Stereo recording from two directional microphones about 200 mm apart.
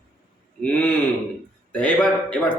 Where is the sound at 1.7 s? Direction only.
5° left (ahead or behind).